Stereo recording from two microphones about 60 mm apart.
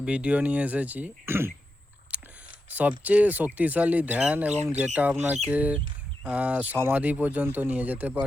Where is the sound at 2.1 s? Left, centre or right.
Right.